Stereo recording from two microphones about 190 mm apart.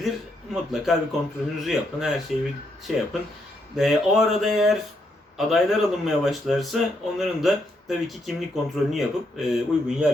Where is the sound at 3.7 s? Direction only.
Centre (ahead or behind).